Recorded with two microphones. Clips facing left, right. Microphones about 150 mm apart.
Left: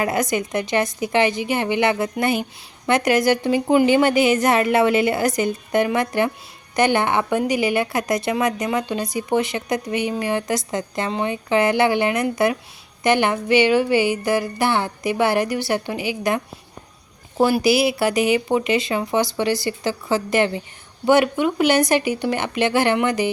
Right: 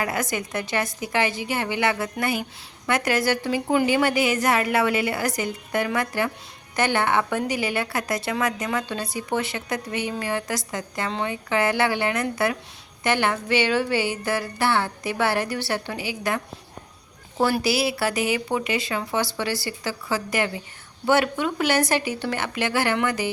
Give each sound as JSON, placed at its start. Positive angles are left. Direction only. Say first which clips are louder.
{"t": 0.0, "sound": "a woman's voice", "louder": "left 5 dB", "side_deg": 20}